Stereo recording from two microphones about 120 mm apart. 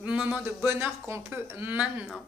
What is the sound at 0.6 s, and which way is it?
Speech, 20° right (ahead or behind).